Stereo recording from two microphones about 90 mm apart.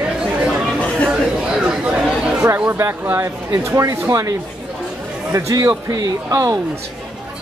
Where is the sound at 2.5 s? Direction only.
25° right (ahead or behind).